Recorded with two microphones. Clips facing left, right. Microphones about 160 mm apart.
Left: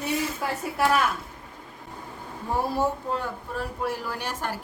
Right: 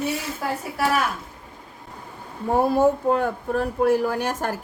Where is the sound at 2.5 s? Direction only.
50° right (ahead or behind).